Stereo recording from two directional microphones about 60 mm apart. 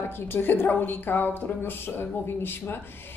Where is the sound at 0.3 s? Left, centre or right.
Left.